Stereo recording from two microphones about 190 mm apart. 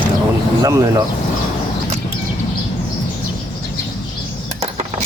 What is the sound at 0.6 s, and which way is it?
Speech, 15° right (ahead or behind).